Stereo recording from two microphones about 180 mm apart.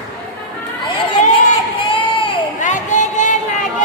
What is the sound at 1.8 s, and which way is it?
Crowd, 30° left (ahead or behind).